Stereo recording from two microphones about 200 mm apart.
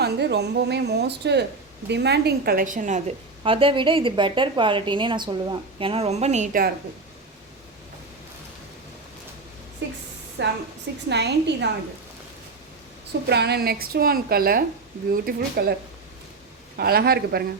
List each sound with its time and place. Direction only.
0.0 s a woman's voice: 55° right (ahead or behind); by 3.0 s 40° right (ahead or behind)
3.4 s a woman's voice: 25° right (ahead or behind)
10.4 s a woman's voice: 60° right (ahead or behind)
13.2 s a woman's voice: 55° right (ahead or behind)
16.7 s a woman's voice: 50° right (ahead or behind)